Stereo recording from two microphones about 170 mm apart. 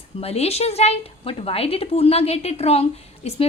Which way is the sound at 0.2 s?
35° left (ahead or behind).